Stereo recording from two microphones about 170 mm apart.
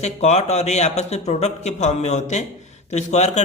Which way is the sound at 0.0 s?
40° left (ahead or behind).